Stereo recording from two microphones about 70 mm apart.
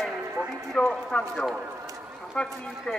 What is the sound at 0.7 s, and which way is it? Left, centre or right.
Speech, centre.